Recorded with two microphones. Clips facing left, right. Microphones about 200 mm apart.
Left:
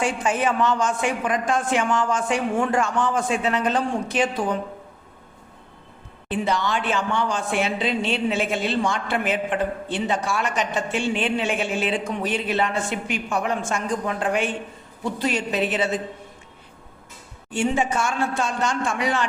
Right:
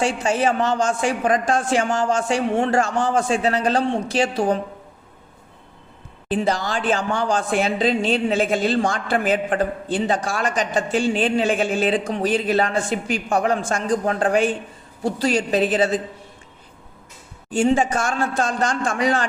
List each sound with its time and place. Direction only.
0.0 s a woman's voice: 30° right (ahead or behind)
2.1 s a woman's voice: 30° right (ahead or behind)
6.2 s a woman's voice: 35° right (ahead or behind)
17.5 s a woman's voice: 35° right (ahead or behind)